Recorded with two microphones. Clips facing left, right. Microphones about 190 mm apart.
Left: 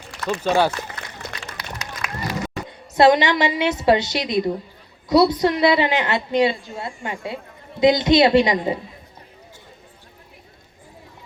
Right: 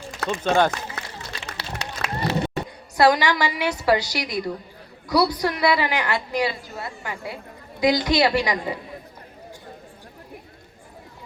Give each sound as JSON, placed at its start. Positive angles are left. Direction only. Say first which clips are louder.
{"t": 0.4, "sound": "speech", "louder": "left 1 dB", "side_deg": 10}
{"t": 1.5, "sound": "a sound", "louder": "right 1 dB", "side_deg": -30}
{"t": 2.6, "sound": "a woman's voice", "louder": "left 4 dB", "side_deg": 25}